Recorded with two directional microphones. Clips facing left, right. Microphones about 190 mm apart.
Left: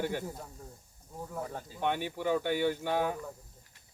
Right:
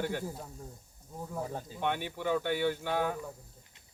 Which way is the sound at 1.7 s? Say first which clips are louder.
Left 2 dB; 5° left (ahead or behind).